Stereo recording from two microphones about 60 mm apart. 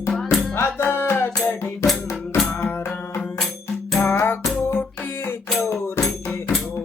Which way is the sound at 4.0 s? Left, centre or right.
Left.